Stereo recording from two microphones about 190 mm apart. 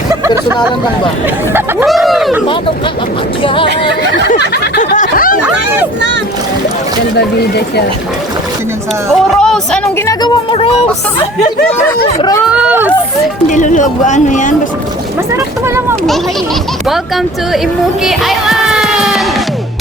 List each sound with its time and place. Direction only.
1.9 s speech: centre (ahead or behind)
3.4 s a woman's voice: 25° left (ahead or behind)
4.9 s snicker: 45° left (ahead or behind)
9.4 s speech: 5° left (ahead or behind)
10.1 s a woman's voice: 25° left (ahead or behind)
12.5 s a sound: 10° right (ahead or behind)
13.5 s speech: 40° left (ahead or behind)
18.0 s child singing: centre (ahead or behind)